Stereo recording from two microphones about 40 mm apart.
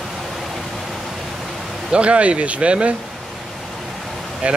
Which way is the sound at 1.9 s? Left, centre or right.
Right.